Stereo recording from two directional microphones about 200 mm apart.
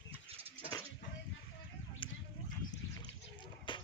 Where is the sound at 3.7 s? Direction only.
25° left (ahead or behind).